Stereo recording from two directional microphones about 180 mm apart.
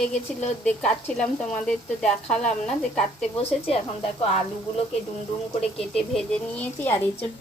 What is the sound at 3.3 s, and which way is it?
Speech, 35° left (ahead or behind).